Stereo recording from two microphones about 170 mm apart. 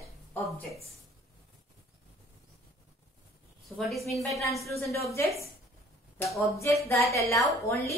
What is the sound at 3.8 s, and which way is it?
Speech, centre (ahead or behind).